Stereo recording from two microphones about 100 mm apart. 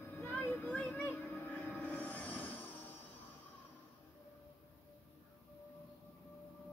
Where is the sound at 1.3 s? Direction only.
5° left (ahead or behind).